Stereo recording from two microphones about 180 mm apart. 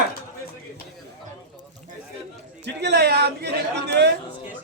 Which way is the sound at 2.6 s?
70° right (ahead or behind).